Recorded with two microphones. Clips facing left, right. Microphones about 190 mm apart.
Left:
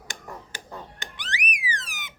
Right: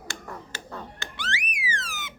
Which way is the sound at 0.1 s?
15° left (ahead or behind).